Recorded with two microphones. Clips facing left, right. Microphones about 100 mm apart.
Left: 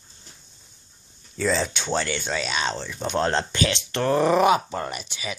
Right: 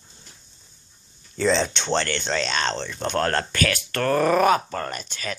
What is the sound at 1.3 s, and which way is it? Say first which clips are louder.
Speech: right 3 dB; 5° left (ahead or behind).